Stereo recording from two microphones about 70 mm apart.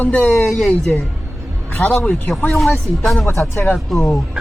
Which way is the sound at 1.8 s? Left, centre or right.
Left.